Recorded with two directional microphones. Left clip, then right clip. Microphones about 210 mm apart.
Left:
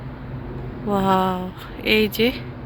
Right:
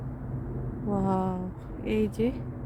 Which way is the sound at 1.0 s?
Centre (ahead or behind).